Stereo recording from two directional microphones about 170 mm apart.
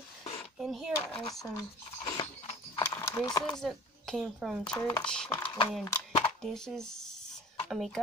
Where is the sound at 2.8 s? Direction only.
15° left (ahead or behind).